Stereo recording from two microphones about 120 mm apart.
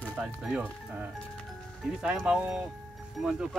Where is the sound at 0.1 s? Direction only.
5° right (ahead or behind).